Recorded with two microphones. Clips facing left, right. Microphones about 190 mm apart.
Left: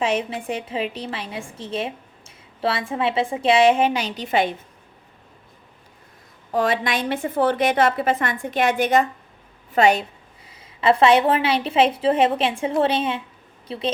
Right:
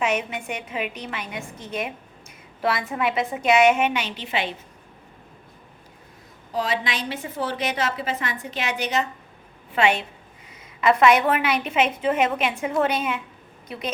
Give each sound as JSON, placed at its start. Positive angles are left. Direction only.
{"t": 0.0, "sound": "a woman's voice", "side_deg": 30}
{"t": 6.5, "sound": "a woman's voice", "side_deg": 55}
{"t": 9.7, "sound": "a woman's voice", "side_deg": 40}